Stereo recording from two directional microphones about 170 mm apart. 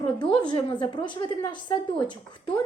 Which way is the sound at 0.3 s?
25° left (ahead or behind).